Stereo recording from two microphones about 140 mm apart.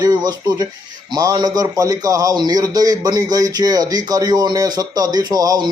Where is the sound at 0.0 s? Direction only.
30° right (ahead or behind).